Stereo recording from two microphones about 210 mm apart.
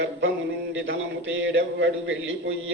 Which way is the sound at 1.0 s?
60° right (ahead or behind).